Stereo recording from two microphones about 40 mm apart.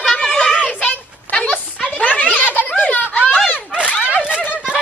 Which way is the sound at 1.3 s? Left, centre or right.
Left.